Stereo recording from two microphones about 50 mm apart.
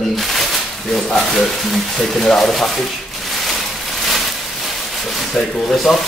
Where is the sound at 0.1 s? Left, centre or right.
Centre.